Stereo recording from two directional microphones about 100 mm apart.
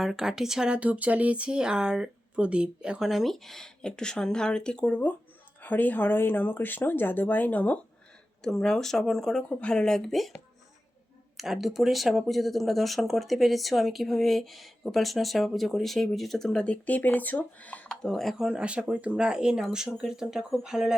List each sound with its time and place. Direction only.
0.0 s speech: 5° right (ahead or behind); by 7.8 s 15° left (ahead or behind)
8.4 s speech: 5° left (ahead or behind)
11.3 s speech: centre (ahead or behind)